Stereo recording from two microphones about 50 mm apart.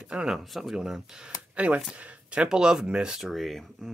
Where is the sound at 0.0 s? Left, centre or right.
Centre.